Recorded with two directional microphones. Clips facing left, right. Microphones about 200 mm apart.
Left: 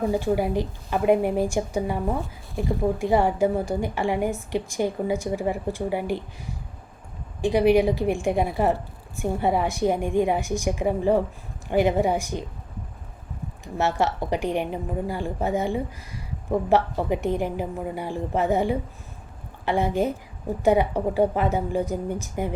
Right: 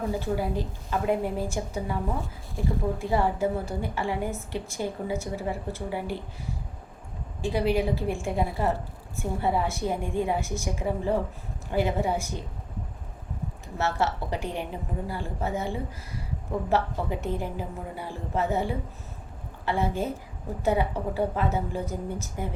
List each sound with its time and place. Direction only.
0.1 s a woman's voice: 15° left (ahead or behind)
3.0 s a woman's voice: 15° left (ahead or behind)
7.4 s a woman's voice: 15° left (ahead or behind)
13.7 s a woman's voice: 15° left (ahead or behind)